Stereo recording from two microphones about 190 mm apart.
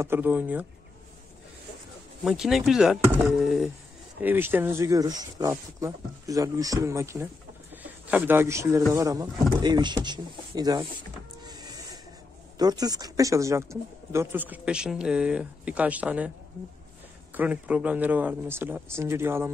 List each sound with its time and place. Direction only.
0.0 s speech: 10° right (ahead or behind)
2.2 s speech: 5° right (ahead or behind); by 10.9 s 20° right (ahead or behind)
11.4 s power windows: 20° right (ahead or behind)
12.5 s speech: 20° right (ahead or behind)
17.3 s speech: 10° right (ahead or behind)